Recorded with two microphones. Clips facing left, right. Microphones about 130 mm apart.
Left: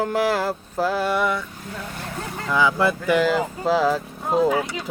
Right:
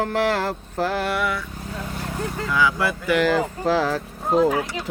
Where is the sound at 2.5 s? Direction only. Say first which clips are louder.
Left 3 dB; 25° left (ahead or behind).